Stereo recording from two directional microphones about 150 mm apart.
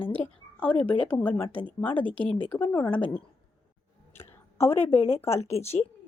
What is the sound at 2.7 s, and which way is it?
Speech, 30° left (ahead or behind).